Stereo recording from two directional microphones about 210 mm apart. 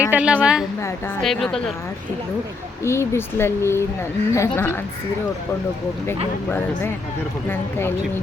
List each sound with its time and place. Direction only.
0.0 s a woman's voice: 5° right (ahead or behind)
0.8 s speech: 15° left (ahead or behind)
1.2 s a woman's voice: centre (ahead or behind)
2.8 s speech: 10° left (ahead or behind)
7.8 s speech: 10° left (ahead or behind)